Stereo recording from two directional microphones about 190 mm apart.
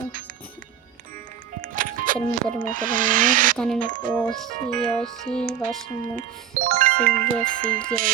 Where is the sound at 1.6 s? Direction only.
45° right (ahead or behind).